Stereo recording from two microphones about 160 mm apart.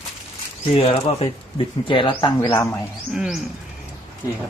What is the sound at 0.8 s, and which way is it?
Speech, 35° left (ahead or behind).